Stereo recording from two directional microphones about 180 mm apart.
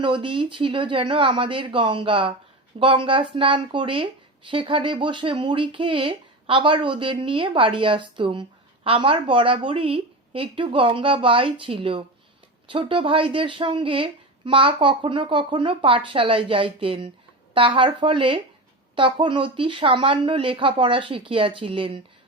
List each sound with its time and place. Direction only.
0.0 s speech: 30° right (ahead or behind)